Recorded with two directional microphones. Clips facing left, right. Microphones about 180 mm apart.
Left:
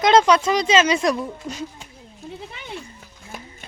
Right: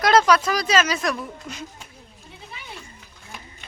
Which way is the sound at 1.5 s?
35° left (ahead or behind).